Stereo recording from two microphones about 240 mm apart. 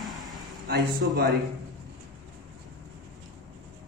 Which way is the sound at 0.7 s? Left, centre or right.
Right.